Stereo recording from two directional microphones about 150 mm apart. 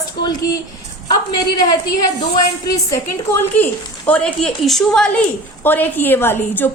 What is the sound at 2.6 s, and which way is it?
Speech, 20° left (ahead or behind).